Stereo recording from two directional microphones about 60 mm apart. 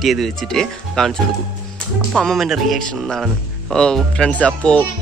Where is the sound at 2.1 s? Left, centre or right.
Centre.